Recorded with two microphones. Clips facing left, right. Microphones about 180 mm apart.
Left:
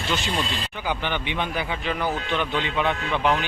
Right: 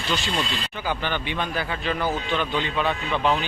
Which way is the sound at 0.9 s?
15° left (ahead or behind).